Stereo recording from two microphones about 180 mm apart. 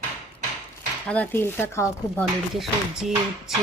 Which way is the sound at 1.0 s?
10° left (ahead or behind).